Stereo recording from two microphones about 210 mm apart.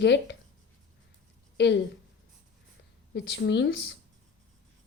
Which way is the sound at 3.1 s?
55° left (ahead or behind).